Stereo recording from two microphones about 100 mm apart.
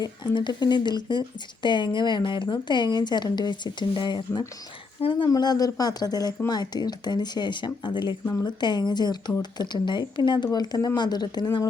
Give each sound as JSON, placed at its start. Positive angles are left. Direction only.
{"t": 0.0, "sound": "speech", "side_deg": 45}
{"t": 8.2, "sound": "speech", "side_deg": 25}
{"t": 8.4, "sound": "speech", "side_deg": 45}